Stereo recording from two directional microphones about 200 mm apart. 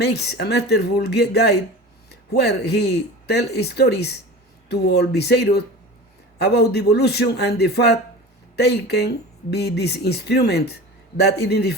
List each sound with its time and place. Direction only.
0.0 s speech: 55° left (ahead or behind)